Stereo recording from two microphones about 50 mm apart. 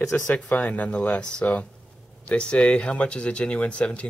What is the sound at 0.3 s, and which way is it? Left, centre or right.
Speech, left.